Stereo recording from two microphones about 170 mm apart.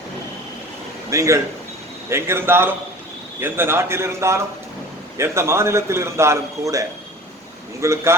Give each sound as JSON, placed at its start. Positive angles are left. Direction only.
{"t": 1.1, "sound": "a man's voice", "side_deg": -20}